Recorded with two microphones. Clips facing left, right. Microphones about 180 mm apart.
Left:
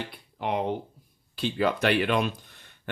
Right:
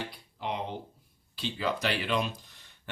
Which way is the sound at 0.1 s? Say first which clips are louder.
Left 6 dB; 55° left (ahead or behind).